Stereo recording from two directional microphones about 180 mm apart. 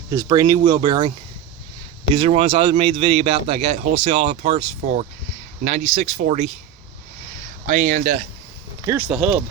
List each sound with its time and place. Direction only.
0.1 s speech: 20° right (ahead or behind)
2.1 s speech: 35° right (ahead or behind)
7.7 s speech: 45° right (ahead or behind)
8.9 s speech: 10° right (ahead or behind)